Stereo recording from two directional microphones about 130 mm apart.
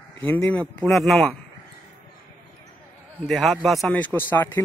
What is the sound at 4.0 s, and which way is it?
Speech, 15° left (ahead or behind).